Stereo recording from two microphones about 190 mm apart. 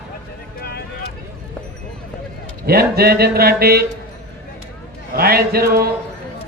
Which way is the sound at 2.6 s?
55° right (ahead or behind).